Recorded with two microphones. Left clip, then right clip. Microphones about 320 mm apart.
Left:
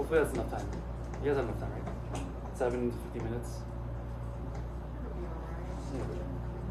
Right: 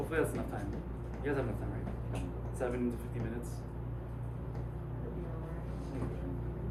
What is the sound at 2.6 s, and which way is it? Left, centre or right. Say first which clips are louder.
Speech: left 5 dB; left.